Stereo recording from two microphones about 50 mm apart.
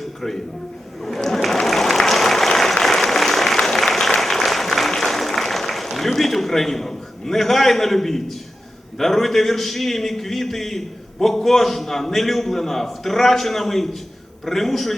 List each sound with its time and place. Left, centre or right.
1.0 s applause: centre
9.0 s a man's voice: centre